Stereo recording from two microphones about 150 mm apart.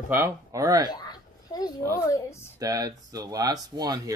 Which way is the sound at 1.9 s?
20° left (ahead or behind).